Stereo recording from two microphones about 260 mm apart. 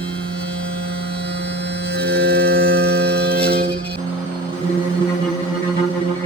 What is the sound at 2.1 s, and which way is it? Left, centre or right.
Music, right.